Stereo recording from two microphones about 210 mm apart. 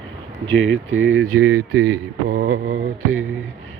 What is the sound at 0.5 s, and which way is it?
Speech, 65° right (ahead or behind).